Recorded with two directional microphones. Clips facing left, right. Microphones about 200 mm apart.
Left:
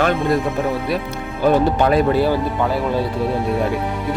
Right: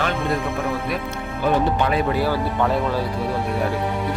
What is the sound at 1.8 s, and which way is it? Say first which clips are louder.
Speech: left 5 dB; 40° left (ahead or behind).